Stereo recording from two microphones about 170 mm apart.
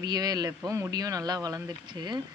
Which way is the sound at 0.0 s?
25° right (ahead or behind).